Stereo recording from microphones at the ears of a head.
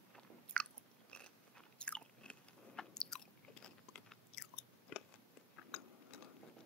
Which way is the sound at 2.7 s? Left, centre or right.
Left.